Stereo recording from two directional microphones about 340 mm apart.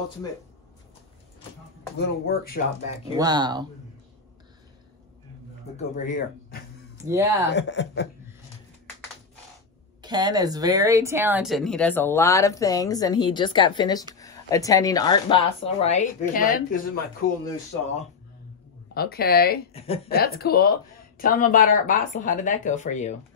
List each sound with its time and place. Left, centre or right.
2.0 s speech: left
3.2 s speech: centre
5.8 s speech: left
7.0 s speech: centre
7.4 s speech: left
10.0 s speech: centre; by 17.0 s left
18.9 s speech: left